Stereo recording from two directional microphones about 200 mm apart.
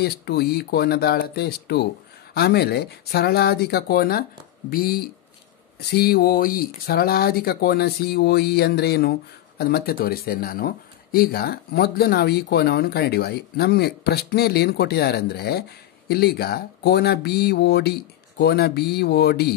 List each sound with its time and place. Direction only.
0.0 s speech: 55° left (ahead or behind)